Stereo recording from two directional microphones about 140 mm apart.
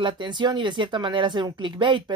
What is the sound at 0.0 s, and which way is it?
Speech, 30° right (ahead or behind).